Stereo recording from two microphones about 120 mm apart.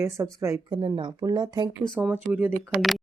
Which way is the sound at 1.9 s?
15° right (ahead or behind).